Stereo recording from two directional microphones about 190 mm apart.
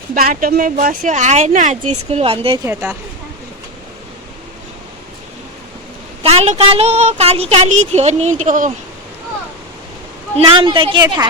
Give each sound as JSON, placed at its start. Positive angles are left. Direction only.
{"t": 0.1, "sound": "speech", "side_deg": -50}
{"t": 6.2, "sound": "speech", "side_deg": -35}
{"t": 10.3, "sound": "a woman's voice", "side_deg": -30}